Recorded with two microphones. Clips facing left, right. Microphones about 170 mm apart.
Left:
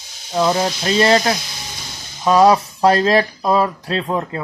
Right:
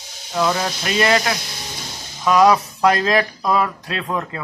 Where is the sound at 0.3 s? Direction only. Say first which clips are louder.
Left 3 dB; 25° left (ahead or behind).